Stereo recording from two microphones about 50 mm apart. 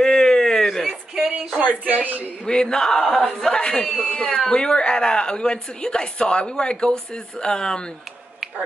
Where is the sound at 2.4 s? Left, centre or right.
Centre.